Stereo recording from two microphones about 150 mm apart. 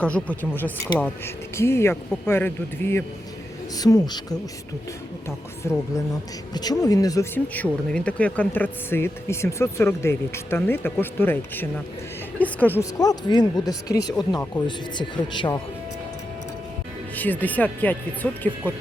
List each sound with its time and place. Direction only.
0.0 s speech: 10° left (ahead or behind); by 4.4 s 25° left (ahead or behind)
5.6 s speech: 15° left (ahead or behind)
7.3 s speech: 10° left (ahead or behind)
13.0 s speech: 25° left (ahead or behind)
17.2 s speech: 10° left (ahead or behind)